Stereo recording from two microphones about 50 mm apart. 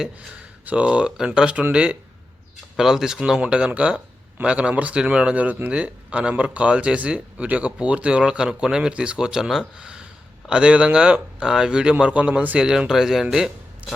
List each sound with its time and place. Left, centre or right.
0.6 s speech: right
2.7 s speech: centre
3.7 s speech: right; by 9.6 s centre
9.7 s speech: right
12.5 s speech: centre
13.3 s a sound: centre